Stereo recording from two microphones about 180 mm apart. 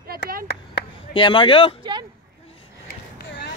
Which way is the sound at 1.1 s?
30° left (ahead or behind).